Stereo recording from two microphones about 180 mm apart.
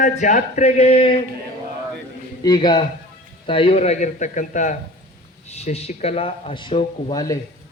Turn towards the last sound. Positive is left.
turn(degrees=20)  # may be behind; listen again after turning